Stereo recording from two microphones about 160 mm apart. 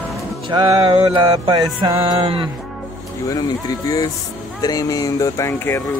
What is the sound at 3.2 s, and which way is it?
Speech, 25° left (ahead or behind).